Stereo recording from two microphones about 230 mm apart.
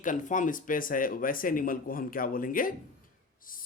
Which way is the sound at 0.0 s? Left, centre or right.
Left.